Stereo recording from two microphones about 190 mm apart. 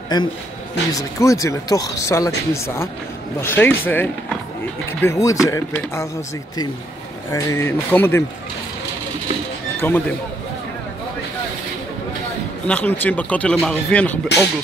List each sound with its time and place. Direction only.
0.1 s a man's voice: 20° left (ahead or behind)
7.2 s speech: 15° left (ahead or behind)
9.8 s speech: 10° left (ahead or behind)
12.6 s speech: 10° left (ahead or behind)